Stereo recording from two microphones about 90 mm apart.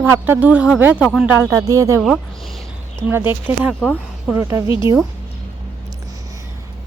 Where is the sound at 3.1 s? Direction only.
25° right (ahead or behind).